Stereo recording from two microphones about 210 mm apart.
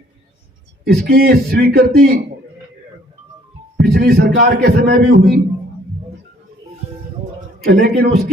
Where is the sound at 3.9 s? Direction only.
45° right (ahead or behind).